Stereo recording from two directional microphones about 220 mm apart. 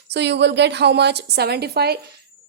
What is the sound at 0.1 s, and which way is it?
A woman's voice, 50° right (ahead or behind).